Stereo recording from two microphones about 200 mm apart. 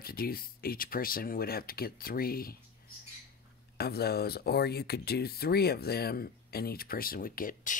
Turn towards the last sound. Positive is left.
turn(degrees=45)  # may be behind; listen again after turning